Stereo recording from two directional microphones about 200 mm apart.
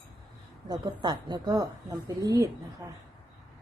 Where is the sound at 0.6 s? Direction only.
20° right (ahead or behind).